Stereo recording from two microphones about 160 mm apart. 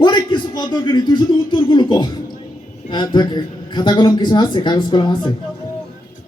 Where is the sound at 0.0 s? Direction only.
30° left (ahead or behind).